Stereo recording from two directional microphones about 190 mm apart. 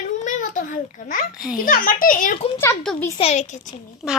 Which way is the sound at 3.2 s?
35° left (ahead or behind).